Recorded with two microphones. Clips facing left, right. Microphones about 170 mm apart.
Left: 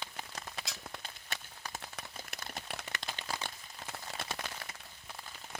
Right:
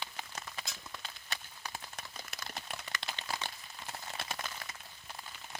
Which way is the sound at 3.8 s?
60° left (ahead or behind).